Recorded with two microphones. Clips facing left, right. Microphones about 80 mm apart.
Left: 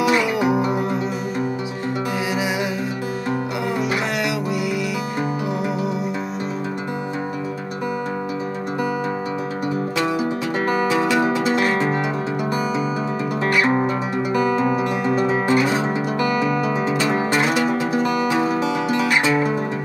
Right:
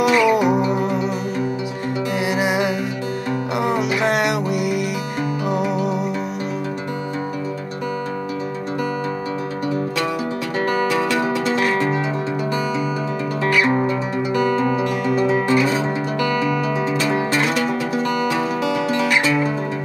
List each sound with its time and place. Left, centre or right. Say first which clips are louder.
0.3 s music: right 3 dB; right
2.3 s music: right 6 dB; right
3.7 s music: right 3 dB; right
11.0 s music: left 1 dB; centre
14.6 s music: even; centre
15.5 s music: left 1 dB; centre
17.1 s music: even; centre